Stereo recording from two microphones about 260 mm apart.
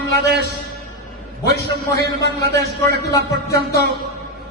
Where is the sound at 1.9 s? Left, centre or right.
Right.